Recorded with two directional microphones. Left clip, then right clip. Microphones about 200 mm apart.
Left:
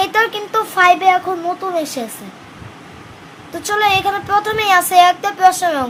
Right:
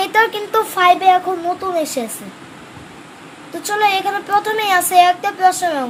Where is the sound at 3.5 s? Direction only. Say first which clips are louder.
Left 1 dB; 10° left (ahead or behind).